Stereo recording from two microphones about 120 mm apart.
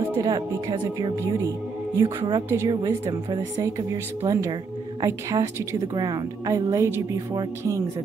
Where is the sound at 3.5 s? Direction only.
25° right (ahead or behind).